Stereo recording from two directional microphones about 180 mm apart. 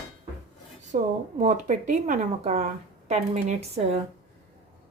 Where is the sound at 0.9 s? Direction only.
45° right (ahead or behind).